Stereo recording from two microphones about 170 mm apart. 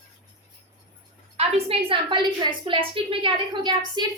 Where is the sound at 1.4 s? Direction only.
35° right (ahead or behind).